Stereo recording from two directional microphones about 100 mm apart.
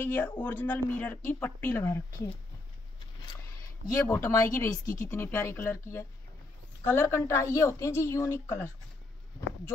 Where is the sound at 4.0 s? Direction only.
30° left (ahead or behind).